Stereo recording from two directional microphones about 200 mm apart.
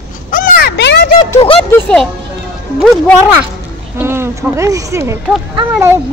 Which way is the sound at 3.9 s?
10° right (ahead or behind).